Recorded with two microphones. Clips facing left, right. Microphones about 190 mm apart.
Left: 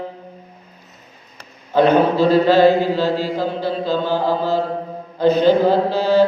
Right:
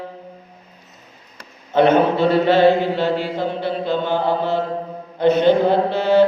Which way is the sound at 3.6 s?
35° left (ahead or behind).